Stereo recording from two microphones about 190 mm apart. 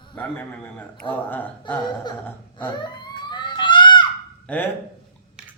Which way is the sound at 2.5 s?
25° left (ahead or behind).